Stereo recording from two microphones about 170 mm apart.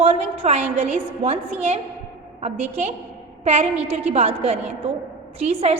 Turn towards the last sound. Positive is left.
turn(degrees=-35)  # may be behind; listen again after turning